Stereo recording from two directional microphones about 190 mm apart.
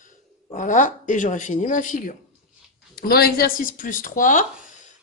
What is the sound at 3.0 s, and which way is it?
A woman's voice, 55° left (ahead or behind).